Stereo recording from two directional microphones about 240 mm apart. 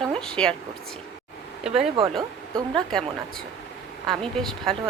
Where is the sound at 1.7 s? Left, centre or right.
Right.